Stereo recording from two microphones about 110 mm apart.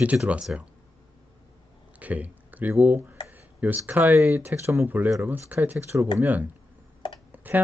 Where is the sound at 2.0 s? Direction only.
15° right (ahead or behind).